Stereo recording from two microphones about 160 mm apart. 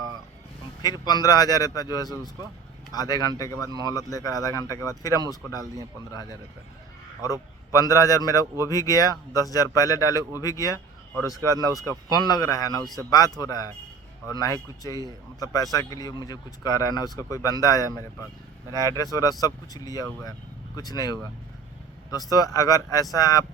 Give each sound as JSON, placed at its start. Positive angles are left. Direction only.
{"t": 0.8, "sound": "speech", "side_deg": 25}
{"t": 7.2, "sound": "speech", "side_deg": 20}
{"t": 12.1, "sound": "speech", "side_deg": 25}